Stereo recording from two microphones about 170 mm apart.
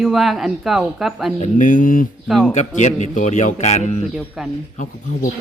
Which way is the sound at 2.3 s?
Centre (ahead or behind).